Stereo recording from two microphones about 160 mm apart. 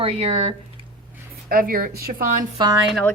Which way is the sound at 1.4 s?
65° right (ahead or behind).